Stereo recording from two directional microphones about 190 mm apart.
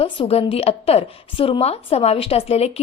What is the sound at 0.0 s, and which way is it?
A woman's voice, 30° left (ahead or behind).